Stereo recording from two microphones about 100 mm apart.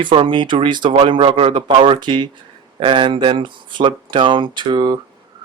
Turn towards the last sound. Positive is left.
turn(degrees=-45)  # may be behind; listen again after turning